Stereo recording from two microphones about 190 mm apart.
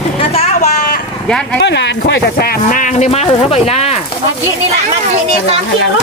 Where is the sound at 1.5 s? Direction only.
65° left (ahead or behind); by 3.9 s 35° left (ahead or behind).